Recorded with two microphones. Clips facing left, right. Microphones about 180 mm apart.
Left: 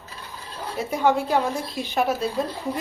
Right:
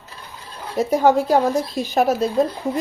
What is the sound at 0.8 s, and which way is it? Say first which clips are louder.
Speech: right 6 dB; 40° right (ahead or behind).